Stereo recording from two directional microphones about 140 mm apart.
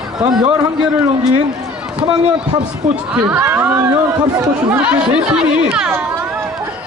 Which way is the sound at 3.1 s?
15° right (ahead or behind).